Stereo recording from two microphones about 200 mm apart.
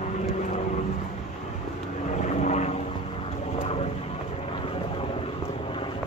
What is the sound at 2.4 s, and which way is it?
Vehicle, 35° left (ahead or behind).